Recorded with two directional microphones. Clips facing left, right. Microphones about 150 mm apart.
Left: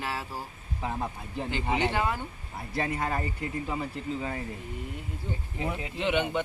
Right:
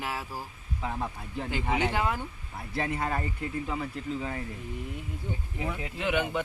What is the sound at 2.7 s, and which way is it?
Speech, centre (ahead or behind).